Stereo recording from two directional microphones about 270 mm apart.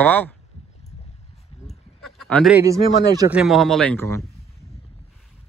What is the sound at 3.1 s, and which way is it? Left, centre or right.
Speech, centre.